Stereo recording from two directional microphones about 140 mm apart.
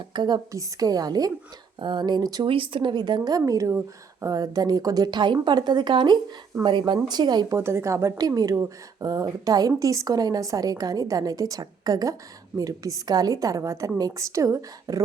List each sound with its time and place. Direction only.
0.1 s speech: 30° right (ahead or behind)
7.6 s speech: 20° right (ahead or behind)